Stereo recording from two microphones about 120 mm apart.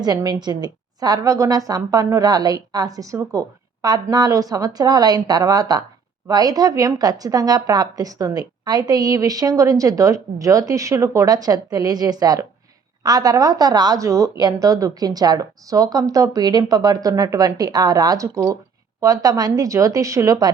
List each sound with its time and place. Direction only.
0.0 s a woman's voice: 35° right (ahead or behind)